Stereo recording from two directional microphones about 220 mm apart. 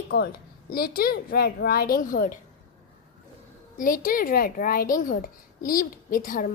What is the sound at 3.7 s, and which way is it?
A woman's voice, 40° left (ahead or behind).